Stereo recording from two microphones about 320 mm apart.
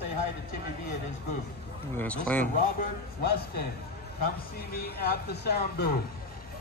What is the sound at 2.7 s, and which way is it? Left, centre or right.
Speech, left.